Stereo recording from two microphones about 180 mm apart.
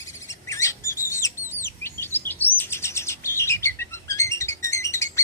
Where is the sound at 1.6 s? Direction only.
15° left (ahead or behind).